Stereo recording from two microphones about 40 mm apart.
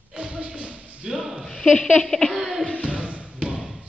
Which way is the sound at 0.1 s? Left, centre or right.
Right.